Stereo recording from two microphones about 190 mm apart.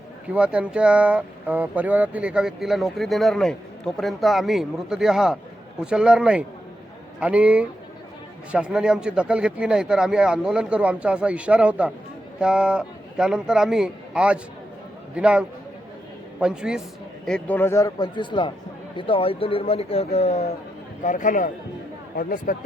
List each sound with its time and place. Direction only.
0.3 s a man's voice: 5° right (ahead or behind)
17.2 s a man's voice: 5° left (ahead or behind); by 22.5 s 50° left (ahead or behind)